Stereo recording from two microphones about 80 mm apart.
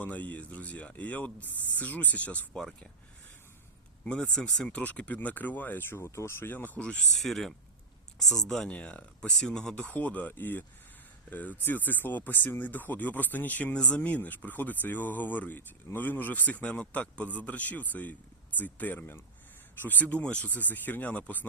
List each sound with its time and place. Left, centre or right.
0.0 s speech: centre
2.6 s speech: centre
4.0 s speech: centre
7.2 s speech: centre
9.7 s speech: left